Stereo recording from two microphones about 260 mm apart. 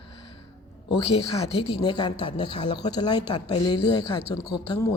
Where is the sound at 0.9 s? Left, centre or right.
Left.